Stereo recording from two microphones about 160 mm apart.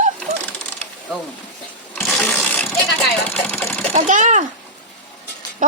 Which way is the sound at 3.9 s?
45° right (ahead or behind).